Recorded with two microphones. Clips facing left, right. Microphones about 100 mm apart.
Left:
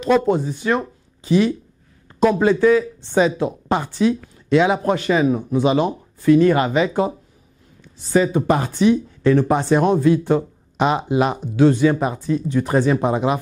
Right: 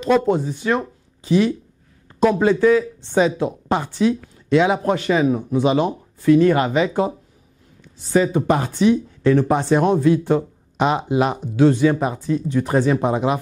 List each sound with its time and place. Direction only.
0.2 s speech: 20° left (ahead or behind)
2.1 s speech: 20° left (ahead or behind)